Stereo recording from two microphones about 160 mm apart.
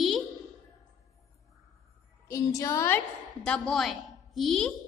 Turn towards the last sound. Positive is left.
turn(degrees=0)  # may be behind; listen again after turning